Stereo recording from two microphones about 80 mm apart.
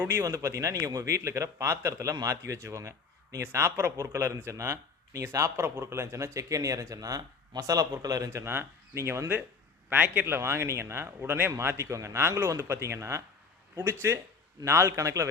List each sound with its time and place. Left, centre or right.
0.1 s speech: right
9.9 s speech: right